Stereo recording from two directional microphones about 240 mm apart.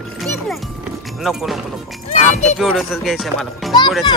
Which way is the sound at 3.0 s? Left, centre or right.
Centre.